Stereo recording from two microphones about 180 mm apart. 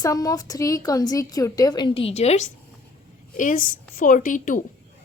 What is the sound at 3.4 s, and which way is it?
A woman's voice, 50° left (ahead or behind).